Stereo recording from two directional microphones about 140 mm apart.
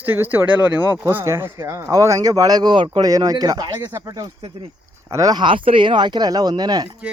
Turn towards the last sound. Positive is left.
turn(degrees=-30)  # may be behind; listen again after turning